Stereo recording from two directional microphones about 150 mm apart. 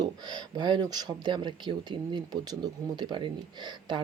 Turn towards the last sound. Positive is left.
turn(degrees=-30)  # may be behind; listen again after turning